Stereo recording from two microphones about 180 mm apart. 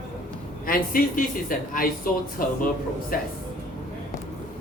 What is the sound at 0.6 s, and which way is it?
Speech, 50° left (ahead or behind).